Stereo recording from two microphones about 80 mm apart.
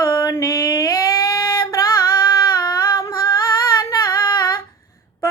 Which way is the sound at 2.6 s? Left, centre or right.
Left.